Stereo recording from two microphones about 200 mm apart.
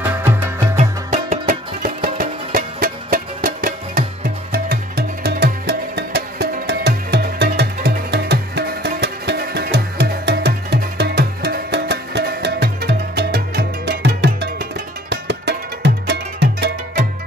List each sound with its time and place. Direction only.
0.0 s music: 10° right (ahead or behind)
0.7 s music: 35° right (ahead or behind); by 17.0 s 55° right (ahead or behind)